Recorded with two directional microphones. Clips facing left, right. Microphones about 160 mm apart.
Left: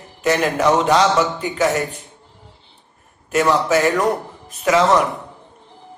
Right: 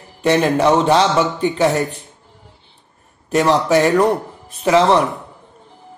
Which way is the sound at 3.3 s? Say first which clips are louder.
Right 2 dB; 35° right (ahead or behind).